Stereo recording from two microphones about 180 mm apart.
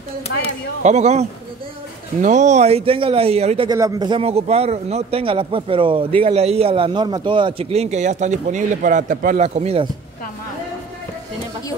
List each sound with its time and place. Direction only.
0.8 s a man's voice: 40° right (ahead or behind)
2.2 s a man's voice: 40° right (ahead or behind)
3.7 s a man's voice: 20° right (ahead or behind); by 9.8 s 35° right (ahead or behind)